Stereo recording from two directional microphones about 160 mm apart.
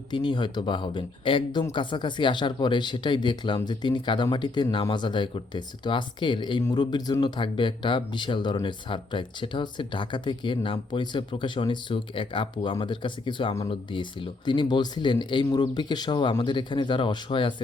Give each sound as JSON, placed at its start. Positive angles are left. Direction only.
{"t": 0.1, "sound": "speech", "side_deg": 30}